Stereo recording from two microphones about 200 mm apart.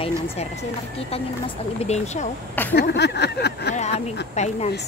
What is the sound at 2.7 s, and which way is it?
Speech, 55° left (ahead or behind).